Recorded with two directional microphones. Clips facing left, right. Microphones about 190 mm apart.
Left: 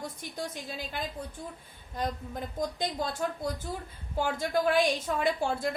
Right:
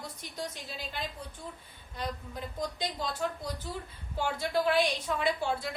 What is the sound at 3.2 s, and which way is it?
A woman's voice, 45° left (ahead or behind).